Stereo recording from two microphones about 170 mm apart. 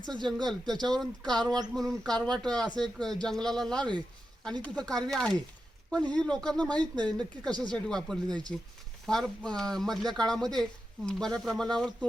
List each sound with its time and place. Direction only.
0.0 s speech: 5° left (ahead or behind)